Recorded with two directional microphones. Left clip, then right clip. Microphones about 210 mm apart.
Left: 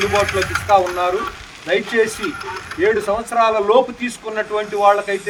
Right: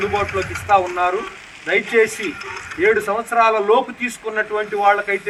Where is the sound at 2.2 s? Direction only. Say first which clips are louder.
Left 2 dB; 30° left (ahead or behind).